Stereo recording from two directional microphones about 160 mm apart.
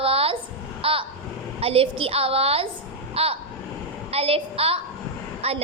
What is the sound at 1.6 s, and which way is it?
A woman's voice, 35° right (ahead or behind).